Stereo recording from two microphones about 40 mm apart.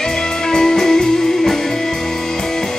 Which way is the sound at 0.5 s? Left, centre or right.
Centre.